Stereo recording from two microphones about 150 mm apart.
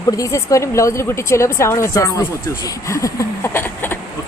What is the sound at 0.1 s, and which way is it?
A woman's voice, 20° left (ahead or behind).